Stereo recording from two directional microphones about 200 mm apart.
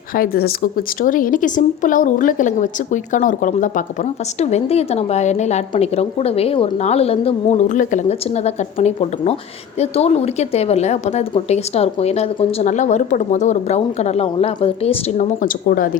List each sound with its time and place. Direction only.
0.2 s a woman's voice: 50° left (ahead or behind); by 15.3 s 30° left (ahead or behind)
15.4 s speech: 45° left (ahead or behind)